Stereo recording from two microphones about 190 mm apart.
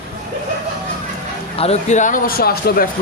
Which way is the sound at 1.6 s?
35° left (ahead or behind).